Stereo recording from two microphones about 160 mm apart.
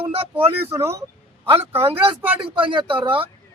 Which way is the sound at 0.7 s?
15° right (ahead or behind).